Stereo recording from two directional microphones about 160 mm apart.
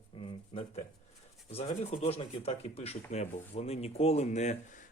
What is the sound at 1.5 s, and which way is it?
Speech, 40° left (ahead or behind).